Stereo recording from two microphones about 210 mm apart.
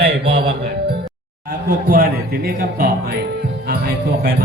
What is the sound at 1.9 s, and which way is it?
Speech, 45° right (ahead or behind).